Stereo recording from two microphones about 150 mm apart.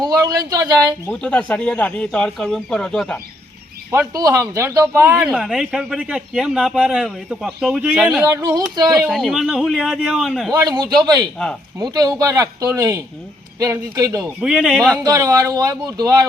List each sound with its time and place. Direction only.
0.0 s speech: 25° right (ahead or behind)
1.1 s speech: 5° left (ahead or behind)
3.9 s speech: 25° right (ahead or behind)
5.1 s speech: centre (ahead or behind)
8.2 s speech: 25° right (ahead or behind)
8.9 s speech: 5° right (ahead or behind)
10.8 s speech: 25° right (ahead or behind)
14.3 s speech: 5° right (ahead or behind)
15.0 s speech: 25° right (ahead or behind)